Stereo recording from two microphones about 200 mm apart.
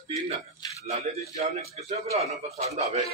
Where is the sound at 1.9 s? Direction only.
30° right (ahead or behind).